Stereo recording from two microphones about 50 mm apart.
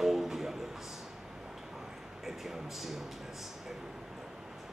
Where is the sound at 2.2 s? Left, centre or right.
Centre.